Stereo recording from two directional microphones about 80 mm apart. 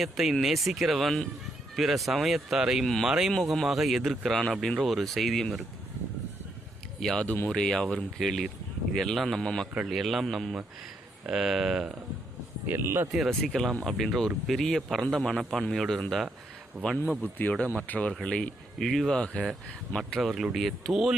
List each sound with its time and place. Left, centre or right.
0.0 s speech: centre
7.0 s speech: centre
12.6 s speech: right
13.1 s speech: centre
17.7 s speech: centre
20.0 s speech: centre